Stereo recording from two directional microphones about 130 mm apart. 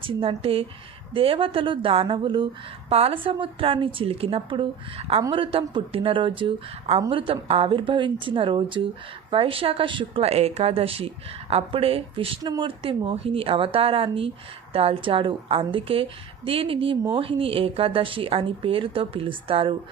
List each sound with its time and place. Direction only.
0.0 s speech: 45° right (ahead or behind)
2.9 s speech: 50° right (ahead or behind)
12.4 s speech: 35° right (ahead or behind)